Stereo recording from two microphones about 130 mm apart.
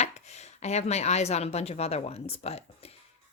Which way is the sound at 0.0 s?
60° left (ahead or behind).